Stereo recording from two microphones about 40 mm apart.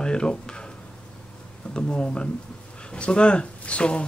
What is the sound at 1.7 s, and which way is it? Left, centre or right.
Speech, left.